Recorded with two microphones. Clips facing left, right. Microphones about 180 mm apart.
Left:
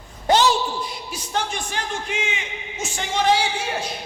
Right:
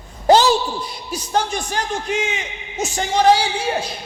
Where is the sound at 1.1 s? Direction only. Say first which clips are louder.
Right 6 dB; 40° right (ahead or behind).